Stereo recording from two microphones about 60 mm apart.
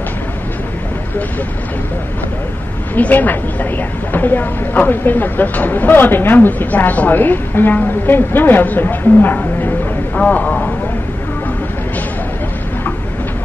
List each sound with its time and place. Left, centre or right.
2.9 s speech: left